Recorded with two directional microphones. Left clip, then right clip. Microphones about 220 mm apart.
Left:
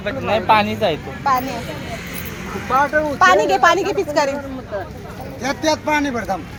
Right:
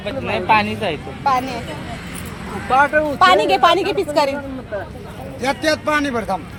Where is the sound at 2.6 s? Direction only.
20° right (ahead or behind).